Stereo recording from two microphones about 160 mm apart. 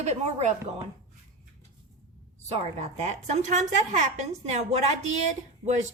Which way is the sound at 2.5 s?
40° right (ahead or behind).